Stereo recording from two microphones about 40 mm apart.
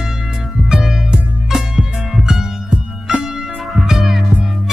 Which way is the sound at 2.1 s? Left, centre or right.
Centre.